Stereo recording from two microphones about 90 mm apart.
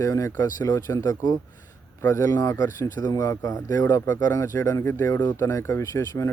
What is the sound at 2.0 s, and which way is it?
Speech, 30° left (ahead or behind).